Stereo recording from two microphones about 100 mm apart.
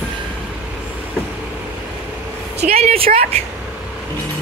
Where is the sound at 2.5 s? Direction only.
90° right.